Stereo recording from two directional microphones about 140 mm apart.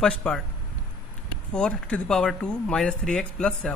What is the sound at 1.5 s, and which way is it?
A man's voice, 10° left (ahead or behind).